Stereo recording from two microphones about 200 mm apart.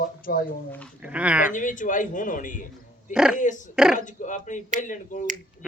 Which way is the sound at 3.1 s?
5° right (ahead or behind).